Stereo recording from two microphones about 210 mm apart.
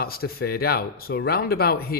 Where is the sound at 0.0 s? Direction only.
45° left (ahead or behind).